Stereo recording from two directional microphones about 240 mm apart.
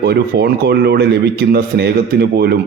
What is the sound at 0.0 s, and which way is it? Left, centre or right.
A man's voice, right.